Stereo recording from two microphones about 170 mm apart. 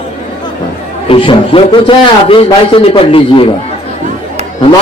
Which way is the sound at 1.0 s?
30° left (ahead or behind).